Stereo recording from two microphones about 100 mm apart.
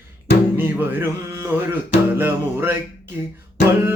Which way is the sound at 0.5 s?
20° right (ahead or behind).